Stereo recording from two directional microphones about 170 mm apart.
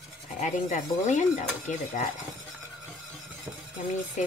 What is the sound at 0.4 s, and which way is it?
Speech, 45° left (ahead or behind).